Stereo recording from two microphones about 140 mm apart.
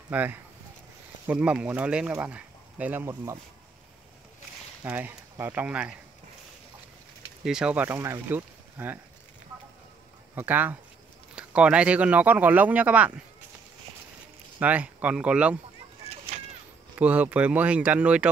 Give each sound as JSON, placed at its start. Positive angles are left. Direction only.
{"t": 0.1, "sound": "speech", "side_deg": -10}
{"t": 4.8, "sound": "speech", "side_deg": -10}
{"t": 7.4, "sound": "speech", "side_deg": -5}
{"t": 10.3, "sound": "speech", "side_deg": -10}
{"t": 14.6, "sound": "speech", "side_deg": -10}
{"t": 16.3, "sound": "a sound", "side_deg": -60}
{"t": 17.0, "sound": "speech", "side_deg": -10}